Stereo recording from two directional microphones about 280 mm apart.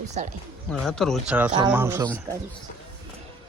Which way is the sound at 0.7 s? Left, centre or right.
Centre.